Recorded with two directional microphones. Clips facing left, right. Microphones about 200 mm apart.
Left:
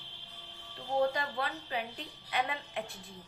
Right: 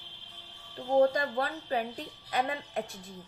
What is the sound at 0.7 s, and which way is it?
A woman's voice, 45° right (ahead or behind).